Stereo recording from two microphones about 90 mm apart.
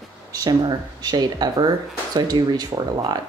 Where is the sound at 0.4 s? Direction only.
50° right (ahead or behind).